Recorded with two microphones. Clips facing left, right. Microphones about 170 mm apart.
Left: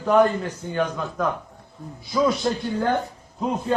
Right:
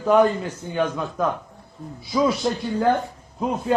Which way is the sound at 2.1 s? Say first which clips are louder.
Even; 10° right (ahead or behind).